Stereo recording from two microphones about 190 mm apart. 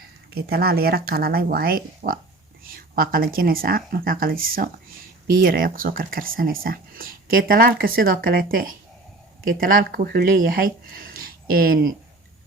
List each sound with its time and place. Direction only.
0.3 s speech: 55° right (ahead or behind)